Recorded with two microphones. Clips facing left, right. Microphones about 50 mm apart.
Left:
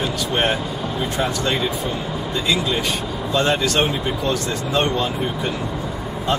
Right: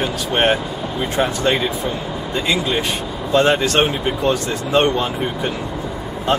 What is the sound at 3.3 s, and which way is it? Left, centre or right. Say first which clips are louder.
Speech: right 4 dB; right.